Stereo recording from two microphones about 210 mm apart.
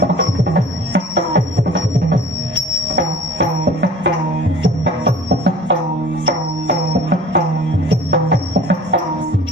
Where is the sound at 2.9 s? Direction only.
60° right (ahead or behind).